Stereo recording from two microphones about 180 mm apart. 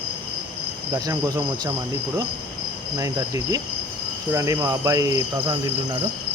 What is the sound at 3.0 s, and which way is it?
Speech, 20° right (ahead or behind).